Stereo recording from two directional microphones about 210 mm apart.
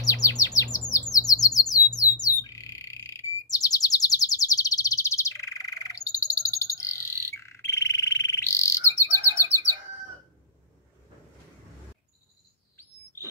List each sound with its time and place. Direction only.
0.0 s chirp: 15° left (ahead or behind)
1.7 s bird: 15° left (ahead or behind)
12.7 s bird: 10° left (ahead or behind)